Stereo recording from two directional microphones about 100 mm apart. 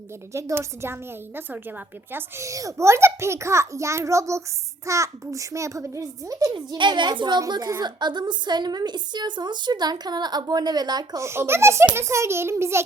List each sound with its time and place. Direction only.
0.3 s a child's voice: 30° right (ahead or behind)
2.1 s a child's voice: 30° right (ahead or behind)
6.5 s a woman's voice: 50° right (ahead or behind)
11.2 s a child's voice: 25° right (ahead or behind)